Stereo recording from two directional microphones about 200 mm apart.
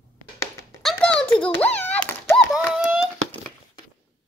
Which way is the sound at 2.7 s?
5° right (ahead or behind).